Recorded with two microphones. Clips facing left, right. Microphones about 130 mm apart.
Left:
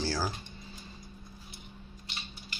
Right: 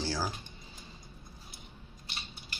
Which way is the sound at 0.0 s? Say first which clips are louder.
Left 2 dB; 20° right (ahead or behind).